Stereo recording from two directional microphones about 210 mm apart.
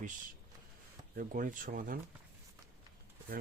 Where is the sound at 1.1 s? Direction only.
40° right (ahead or behind).